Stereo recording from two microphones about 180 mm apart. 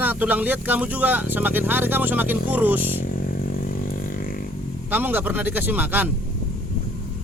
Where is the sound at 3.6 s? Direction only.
50° left (ahead or behind).